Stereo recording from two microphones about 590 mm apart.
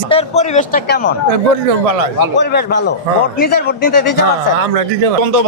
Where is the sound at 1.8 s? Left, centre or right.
Right.